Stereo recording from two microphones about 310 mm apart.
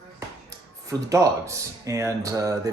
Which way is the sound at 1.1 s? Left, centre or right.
Centre.